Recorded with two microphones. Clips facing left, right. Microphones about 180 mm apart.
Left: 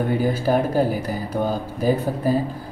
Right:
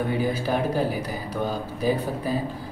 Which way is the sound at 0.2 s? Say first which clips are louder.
Left 4 dB; 45° left (ahead or behind).